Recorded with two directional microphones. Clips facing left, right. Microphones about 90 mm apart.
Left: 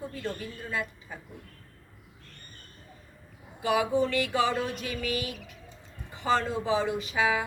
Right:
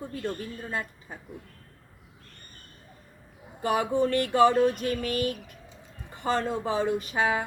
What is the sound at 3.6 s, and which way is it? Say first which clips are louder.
A woman's voice: right 1 dB; 45° right (ahead or behind).